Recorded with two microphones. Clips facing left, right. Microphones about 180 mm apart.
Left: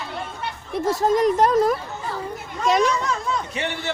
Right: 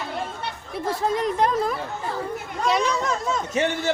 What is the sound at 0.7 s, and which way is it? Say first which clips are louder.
Speech: left 5 dB; 40° left (ahead or behind).